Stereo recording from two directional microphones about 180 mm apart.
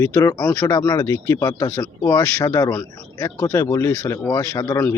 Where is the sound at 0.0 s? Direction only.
15° left (ahead or behind).